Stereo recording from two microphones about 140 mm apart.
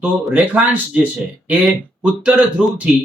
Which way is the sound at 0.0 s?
10° right (ahead or behind).